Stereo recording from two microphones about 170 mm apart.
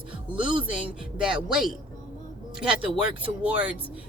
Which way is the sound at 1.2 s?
5° right (ahead or behind).